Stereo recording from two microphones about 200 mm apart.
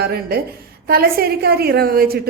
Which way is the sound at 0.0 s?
50° right (ahead or behind).